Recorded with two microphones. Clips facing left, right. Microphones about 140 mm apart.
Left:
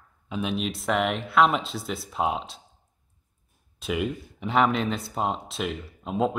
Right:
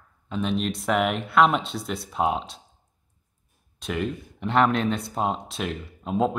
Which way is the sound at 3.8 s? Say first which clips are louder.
Even; 5° left (ahead or behind).